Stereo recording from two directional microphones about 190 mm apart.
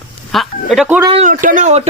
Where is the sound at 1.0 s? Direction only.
30° right (ahead or behind).